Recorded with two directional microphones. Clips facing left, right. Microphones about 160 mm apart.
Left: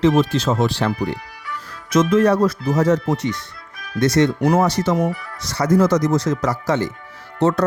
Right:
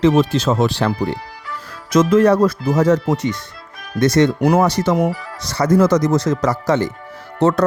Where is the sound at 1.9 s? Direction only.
90° right.